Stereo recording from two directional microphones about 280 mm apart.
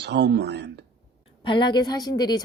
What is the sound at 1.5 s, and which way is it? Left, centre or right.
Speech, centre.